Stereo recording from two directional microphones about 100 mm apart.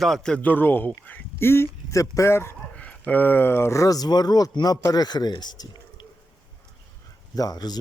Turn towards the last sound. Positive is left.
turn(degrees=40)  # may be behind; listen again after turning